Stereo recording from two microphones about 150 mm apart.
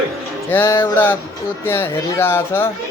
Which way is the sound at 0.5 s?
15° left (ahead or behind).